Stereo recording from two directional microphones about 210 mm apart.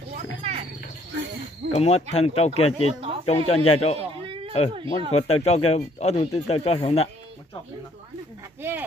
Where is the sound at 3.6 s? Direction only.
30° left (ahead or behind).